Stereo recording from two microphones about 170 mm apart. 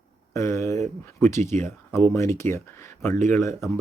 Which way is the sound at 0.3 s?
15° left (ahead or behind).